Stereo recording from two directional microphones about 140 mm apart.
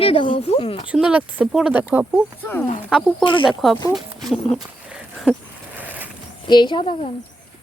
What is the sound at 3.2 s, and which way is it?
Speech, centre (ahead or behind).